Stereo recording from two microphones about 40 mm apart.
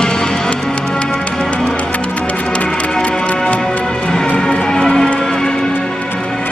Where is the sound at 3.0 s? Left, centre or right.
Left.